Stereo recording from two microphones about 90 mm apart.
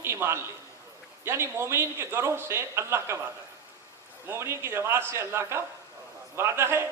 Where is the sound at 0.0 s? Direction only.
30° right (ahead or behind).